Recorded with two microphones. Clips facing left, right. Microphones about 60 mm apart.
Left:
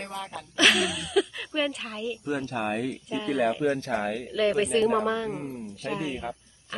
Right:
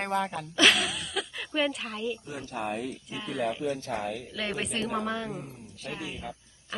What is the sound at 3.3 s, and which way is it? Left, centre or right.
Speech, left.